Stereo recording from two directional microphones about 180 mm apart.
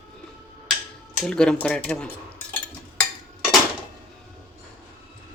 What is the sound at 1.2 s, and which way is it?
Speech, 5° left (ahead or behind).